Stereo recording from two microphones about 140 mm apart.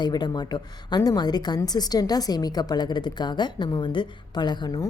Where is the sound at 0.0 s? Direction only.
30° left (ahead or behind).